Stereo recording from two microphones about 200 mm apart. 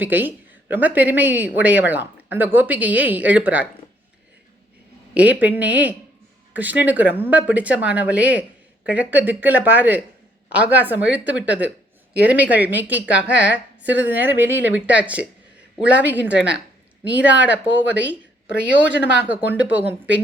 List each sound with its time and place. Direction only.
0.0 s speech: 10° right (ahead or behind)
5.1 s speech: 5° right (ahead or behind)
18.4 s speech: 65° left (ahead or behind)
18.9 s speech: 10° right (ahead or behind)